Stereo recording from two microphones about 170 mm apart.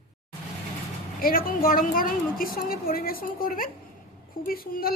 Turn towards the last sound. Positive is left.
turn(degrees=60)  # may be behind; listen again after turning